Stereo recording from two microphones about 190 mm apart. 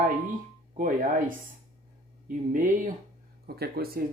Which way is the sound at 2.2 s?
45° right (ahead or behind).